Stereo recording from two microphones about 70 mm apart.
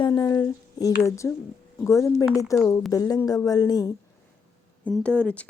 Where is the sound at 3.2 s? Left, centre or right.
Left.